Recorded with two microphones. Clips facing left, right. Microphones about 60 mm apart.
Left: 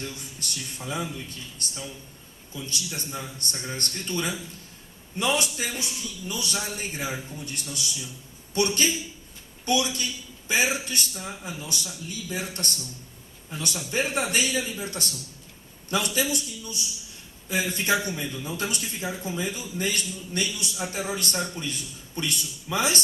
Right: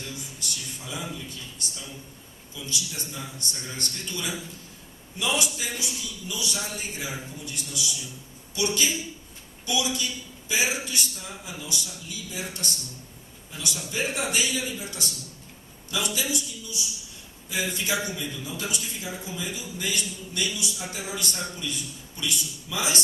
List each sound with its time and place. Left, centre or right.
0.3 s a man's voice: left
16.1 s a man's voice: left